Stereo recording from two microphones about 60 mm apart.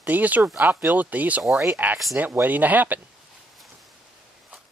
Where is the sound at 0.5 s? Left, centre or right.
Right.